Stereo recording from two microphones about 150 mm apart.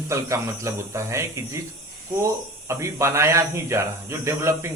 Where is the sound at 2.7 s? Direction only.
20° right (ahead or behind).